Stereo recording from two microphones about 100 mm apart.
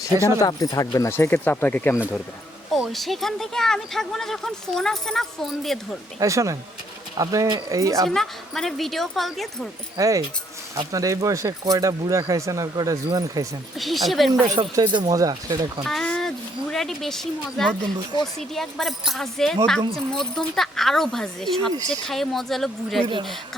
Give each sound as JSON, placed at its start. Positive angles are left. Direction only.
{"t": 0.0, "sound": "speech", "side_deg": 35}
{"t": 2.7, "sound": "speech", "side_deg": 0}
{"t": 6.1, "sound": "speech", "side_deg": -30}
{"t": 8.0, "sound": "speech", "side_deg": 5}
{"t": 10.0, "sound": "speech", "side_deg": -35}
{"t": 13.7, "sound": "speech", "side_deg": 0}
{"t": 14.8, "sound": "speech", "side_deg": -50}
{"t": 15.1, "sound": "speech", "side_deg": -40}
{"t": 15.8, "sound": "speech", "side_deg": 0}